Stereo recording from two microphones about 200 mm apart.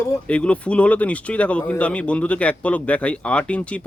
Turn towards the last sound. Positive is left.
turn(degrees=5)  # may be behind; listen again after turning